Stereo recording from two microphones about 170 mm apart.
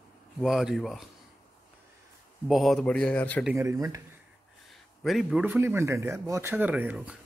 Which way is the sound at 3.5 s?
20° right (ahead or behind).